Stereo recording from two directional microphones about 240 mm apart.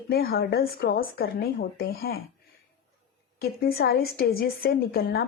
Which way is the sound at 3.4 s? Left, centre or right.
Left.